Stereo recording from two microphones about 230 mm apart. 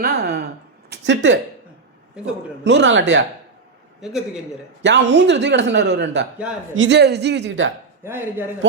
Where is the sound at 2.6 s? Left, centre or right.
Right.